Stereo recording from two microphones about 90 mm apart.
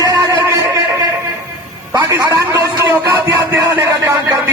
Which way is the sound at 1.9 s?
50° right (ahead or behind).